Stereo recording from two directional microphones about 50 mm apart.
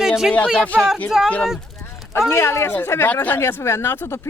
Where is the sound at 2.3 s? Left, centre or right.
Left.